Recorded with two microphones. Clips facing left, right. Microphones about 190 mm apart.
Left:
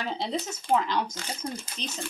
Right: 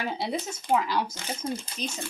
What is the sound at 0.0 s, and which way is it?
Speech, 10° right (ahead or behind).